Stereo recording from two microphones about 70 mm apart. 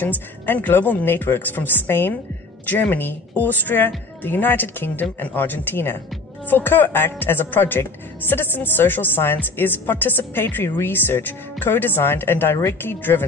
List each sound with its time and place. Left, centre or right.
0.0 s speech: left